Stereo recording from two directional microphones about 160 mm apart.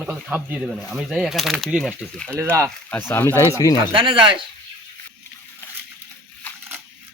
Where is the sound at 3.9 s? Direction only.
30° right (ahead or behind).